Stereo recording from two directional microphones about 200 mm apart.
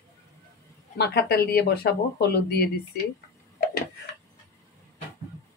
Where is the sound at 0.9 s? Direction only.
55° left (ahead or behind).